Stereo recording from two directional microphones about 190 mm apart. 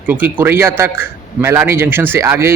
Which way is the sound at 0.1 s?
10° right (ahead or behind).